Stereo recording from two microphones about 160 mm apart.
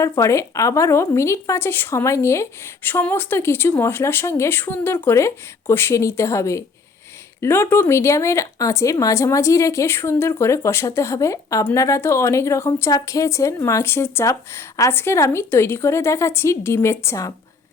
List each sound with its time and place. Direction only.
0.0 s a woman's voice: 20° left (ahead or behind)